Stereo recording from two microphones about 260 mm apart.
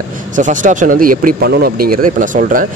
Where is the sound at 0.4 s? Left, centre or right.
Right.